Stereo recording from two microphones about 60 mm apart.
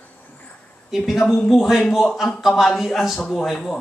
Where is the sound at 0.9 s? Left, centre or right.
Centre.